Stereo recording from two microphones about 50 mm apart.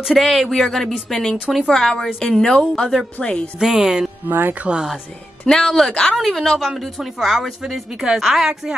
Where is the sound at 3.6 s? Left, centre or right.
Centre.